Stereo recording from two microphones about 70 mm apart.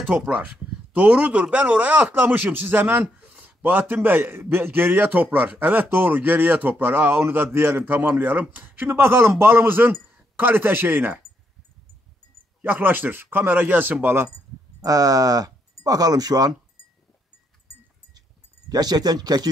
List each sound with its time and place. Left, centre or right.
0.1 s speech: centre
12.6 s speech: right
14.3 s speech: right
18.7 s speech: right